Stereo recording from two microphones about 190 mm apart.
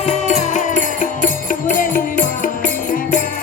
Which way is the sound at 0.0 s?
40° left (ahead or behind).